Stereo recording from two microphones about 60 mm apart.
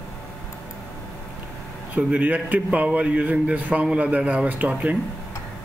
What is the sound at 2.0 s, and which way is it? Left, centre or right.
Speech, right.